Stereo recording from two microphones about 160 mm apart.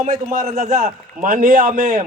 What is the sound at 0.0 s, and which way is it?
A man's voice, 55° right (ahead or behind).